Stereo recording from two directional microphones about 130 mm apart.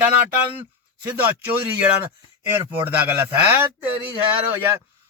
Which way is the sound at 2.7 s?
15° right (ahead or behind).